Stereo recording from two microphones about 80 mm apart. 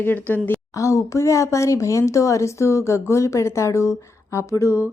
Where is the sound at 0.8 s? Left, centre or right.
Left.